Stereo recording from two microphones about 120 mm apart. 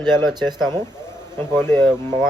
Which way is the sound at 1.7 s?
35° right (ahead or behind).